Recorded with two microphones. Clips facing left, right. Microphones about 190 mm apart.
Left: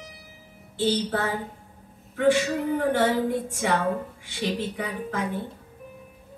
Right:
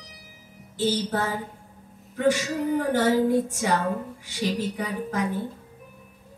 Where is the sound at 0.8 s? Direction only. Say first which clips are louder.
Even; 40° right (ahead or behind).